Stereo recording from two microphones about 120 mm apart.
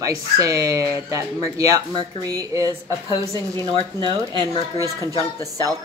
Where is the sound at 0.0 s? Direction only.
30° right (ahead or behind).